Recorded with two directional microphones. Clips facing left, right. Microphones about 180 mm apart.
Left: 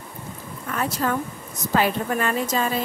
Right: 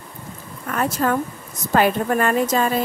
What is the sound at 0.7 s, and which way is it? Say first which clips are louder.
A woman's voice: right 4 dB; 50° right (ahead or behind).